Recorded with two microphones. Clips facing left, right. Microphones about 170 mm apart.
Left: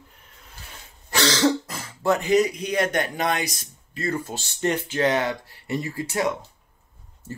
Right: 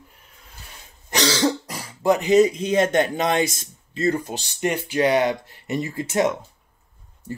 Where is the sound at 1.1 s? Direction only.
15° right (ahead or behind).